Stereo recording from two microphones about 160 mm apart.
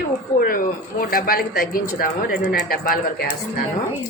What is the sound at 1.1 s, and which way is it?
Speech, 65° left (ahead or behind).